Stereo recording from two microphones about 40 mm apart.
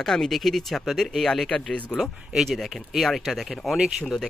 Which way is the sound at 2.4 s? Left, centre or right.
Centre.